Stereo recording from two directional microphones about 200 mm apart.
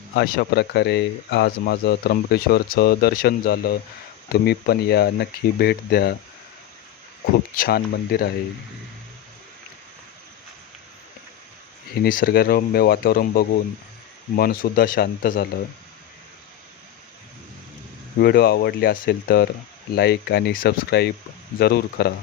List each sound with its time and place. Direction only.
0.1 s speech: 55° left (ahead or behind)
7.5 s speech: 45° left (ahead or behind)
12.0 s speech: 45° left (ahead or behind)
18.2 s speech: 50° left (ahead or behind)